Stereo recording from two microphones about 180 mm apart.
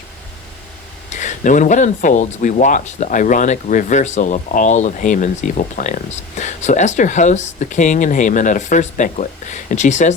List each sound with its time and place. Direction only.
1.1 s speech: 40° left (ahead or behind)